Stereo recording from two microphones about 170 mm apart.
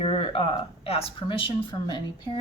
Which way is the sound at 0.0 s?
35° left (ahead or behind).